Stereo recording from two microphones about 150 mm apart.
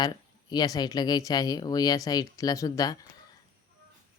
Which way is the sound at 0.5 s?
25° left (ahead or behind).